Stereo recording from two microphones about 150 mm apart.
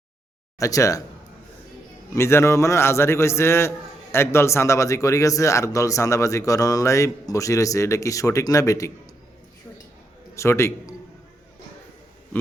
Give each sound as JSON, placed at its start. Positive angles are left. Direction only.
{"t": 0.6, "sound": "a man's voice", "side_deg": 20}
{"t": 2.1, "sound": "a man's voice", "side_deg": 15}
{"t": 10.3, "sound": "a man's voice", "side_deg": 20}